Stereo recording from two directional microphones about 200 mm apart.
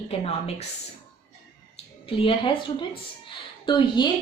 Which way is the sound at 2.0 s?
25° left (ahead or behind).